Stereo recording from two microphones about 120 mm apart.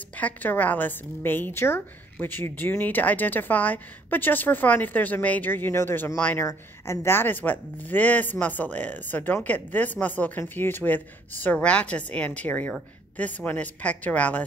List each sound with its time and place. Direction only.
0.2 s a woman's voice: 15° left (ahead or behind)